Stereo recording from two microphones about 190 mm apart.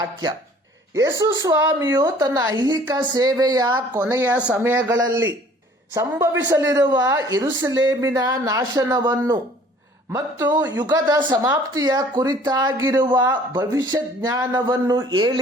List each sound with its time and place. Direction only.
0.0 s speech: 20° right (ahead or behind)